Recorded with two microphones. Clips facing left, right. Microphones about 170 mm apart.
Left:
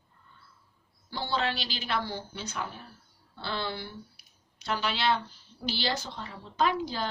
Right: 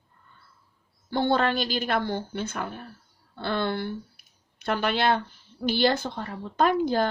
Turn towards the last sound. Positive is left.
turn(degrees=-50)  # may be behind; listen again after turning